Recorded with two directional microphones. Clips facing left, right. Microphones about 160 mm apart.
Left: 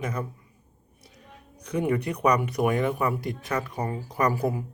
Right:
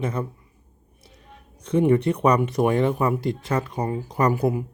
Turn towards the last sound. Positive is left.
turn(degrees=-20)  # may be behind; listen again after turning